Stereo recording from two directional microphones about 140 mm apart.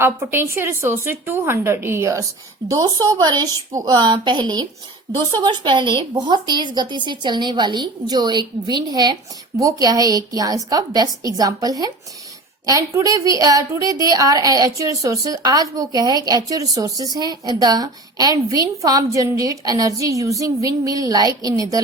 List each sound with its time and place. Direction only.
0.0 s a woman's voice: 15° right (ahead or behind)